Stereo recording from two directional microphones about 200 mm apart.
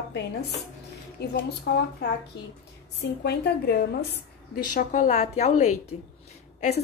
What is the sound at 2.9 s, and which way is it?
Speech, 55° left (ahead or behind).